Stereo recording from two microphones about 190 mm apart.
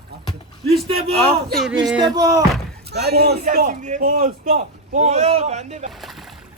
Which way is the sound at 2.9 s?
60° right (ahead or behind).